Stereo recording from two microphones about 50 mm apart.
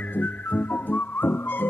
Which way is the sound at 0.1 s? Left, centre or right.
Left.